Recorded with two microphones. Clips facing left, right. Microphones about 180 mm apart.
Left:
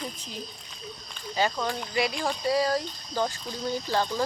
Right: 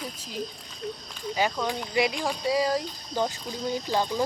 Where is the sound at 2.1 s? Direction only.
10° right (ahead or behind).